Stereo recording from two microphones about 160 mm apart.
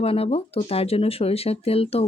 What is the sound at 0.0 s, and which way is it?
Speech, 40° left (ahead or behind).